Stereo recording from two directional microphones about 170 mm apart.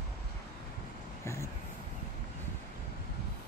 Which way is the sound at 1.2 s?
15° left (ahead or behind).